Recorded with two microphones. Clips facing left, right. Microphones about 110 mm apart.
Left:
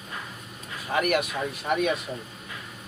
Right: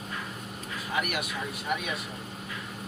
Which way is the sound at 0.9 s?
50° left (ahead or behind).